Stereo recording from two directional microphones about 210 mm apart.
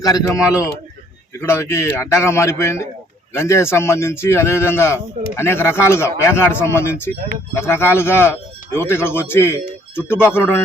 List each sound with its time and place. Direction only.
0.0 s speech: 15° left (ahead or behind)